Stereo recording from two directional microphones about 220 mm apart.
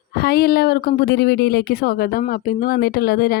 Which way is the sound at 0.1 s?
45° left (ahead or behind).